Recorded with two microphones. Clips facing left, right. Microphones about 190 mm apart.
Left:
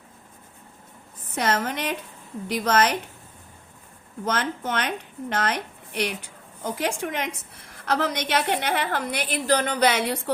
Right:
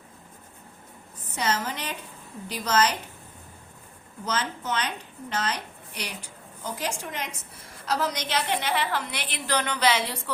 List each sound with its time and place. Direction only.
1.4 s a woman's voice: 55° left (ahead or behind)
4.3 s a woman's voice: 55° left (ahead or behind)